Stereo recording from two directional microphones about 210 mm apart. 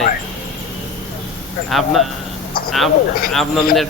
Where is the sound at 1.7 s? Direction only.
Centre (ahead or behind).